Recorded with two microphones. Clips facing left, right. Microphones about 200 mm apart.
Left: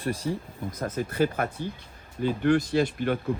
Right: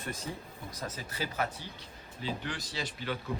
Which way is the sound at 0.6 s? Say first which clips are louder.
Left 11 dB; 50° left (ahead or behind).